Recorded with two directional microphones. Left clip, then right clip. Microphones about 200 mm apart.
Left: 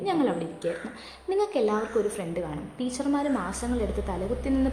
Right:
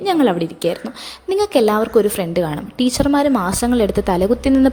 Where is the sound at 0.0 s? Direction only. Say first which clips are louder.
Right 10 dB; 40° right (ahead or behind).